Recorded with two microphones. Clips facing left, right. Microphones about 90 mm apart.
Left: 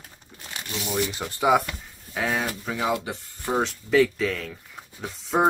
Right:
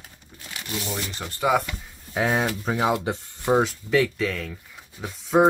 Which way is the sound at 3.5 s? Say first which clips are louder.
Right 2 dB; 5° right (ahead or behind).